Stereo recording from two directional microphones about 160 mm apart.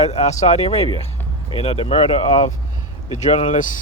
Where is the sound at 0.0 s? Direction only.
40° left (ahead or behind).